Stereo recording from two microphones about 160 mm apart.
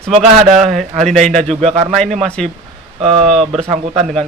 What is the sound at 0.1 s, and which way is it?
Speech, 40° right (ahead or behind).